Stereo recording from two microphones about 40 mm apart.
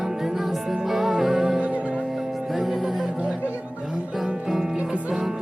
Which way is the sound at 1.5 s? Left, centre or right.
Right.